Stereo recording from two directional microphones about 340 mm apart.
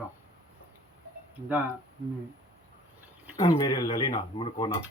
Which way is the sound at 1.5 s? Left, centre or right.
Centre.